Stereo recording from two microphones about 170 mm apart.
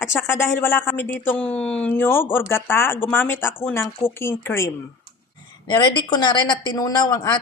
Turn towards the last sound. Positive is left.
turn(degrees=20)  # may be behind; listen again after turning